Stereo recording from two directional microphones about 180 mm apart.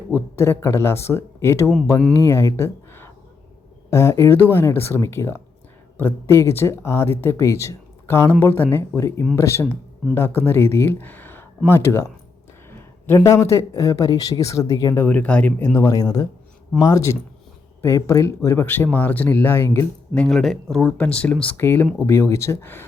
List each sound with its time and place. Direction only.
0.1 s speech: 15° left (ahead or behind)
13.1 s speech: 15° left (ahead or behind)
20.1 s speech: 5° left (ahead or behind)